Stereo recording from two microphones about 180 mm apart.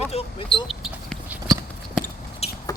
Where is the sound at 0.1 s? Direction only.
35° left (ahead or behind).